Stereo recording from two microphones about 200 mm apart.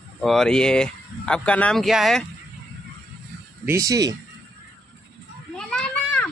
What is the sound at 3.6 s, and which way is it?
Speech, 15° right (ahead or behind).